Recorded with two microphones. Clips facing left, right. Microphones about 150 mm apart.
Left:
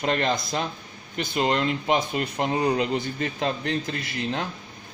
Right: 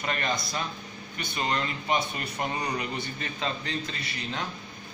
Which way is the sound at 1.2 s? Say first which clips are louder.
Left 6 dB; 75° left (ahead or behind).